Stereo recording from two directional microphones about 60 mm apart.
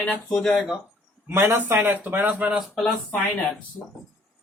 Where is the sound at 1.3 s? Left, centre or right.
Right.